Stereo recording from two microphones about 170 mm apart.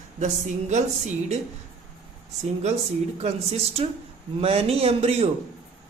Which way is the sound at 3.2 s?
40° right (ahead or behind).